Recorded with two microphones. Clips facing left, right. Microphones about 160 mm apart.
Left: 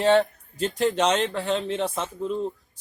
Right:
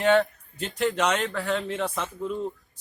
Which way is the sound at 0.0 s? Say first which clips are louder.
Left 2 dB; 30° left (ahead or behind).